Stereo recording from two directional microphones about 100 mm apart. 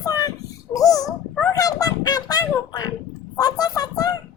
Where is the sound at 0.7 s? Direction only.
35° left (ahead or behind).